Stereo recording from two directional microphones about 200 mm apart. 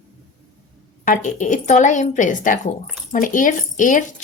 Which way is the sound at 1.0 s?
40° left (ahead or behind).